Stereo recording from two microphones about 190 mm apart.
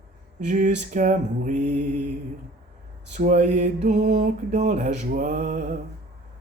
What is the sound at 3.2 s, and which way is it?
Mantra, 40° right (ahead or behind).